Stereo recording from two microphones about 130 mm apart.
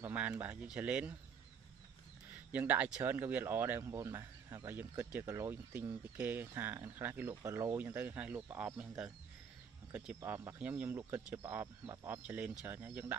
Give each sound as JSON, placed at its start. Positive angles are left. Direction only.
{"t": 0.0, "sound": "speech", "side_deg": -10}
{"t": 2.5, "sound": "speech", "side_deg": -15}